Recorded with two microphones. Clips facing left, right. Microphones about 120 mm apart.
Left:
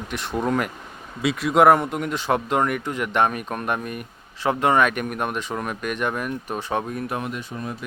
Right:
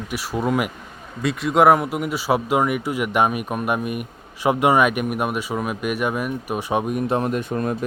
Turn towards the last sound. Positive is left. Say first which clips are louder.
# right 8 dB
turn(degrees=-55)  # may be behind; listen again after turning